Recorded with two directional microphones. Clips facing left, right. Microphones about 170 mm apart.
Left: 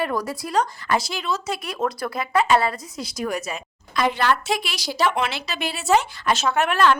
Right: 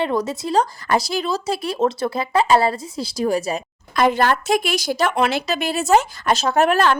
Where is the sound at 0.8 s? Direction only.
40° right (ahead or behind).